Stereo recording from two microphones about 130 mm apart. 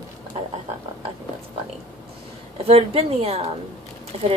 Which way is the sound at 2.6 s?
50° right (ahead or behind).